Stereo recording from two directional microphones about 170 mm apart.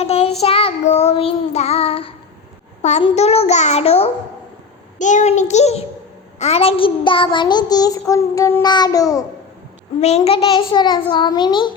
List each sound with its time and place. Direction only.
0.0 s child singing: 35° left (ahead or behind); by 9.2 s 20° left (ahead or behind)
10.0 s child singing: 40° left (ahead or behind)